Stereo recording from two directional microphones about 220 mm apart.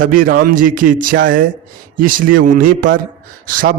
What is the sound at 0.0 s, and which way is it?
Speech, 40° right (ahead or behind).